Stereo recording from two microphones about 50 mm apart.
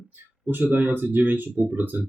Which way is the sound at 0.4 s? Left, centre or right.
Right.